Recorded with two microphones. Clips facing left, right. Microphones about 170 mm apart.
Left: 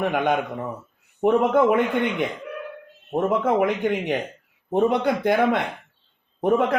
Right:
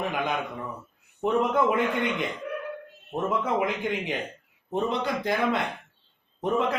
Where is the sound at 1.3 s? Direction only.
60° left (ahead or behind).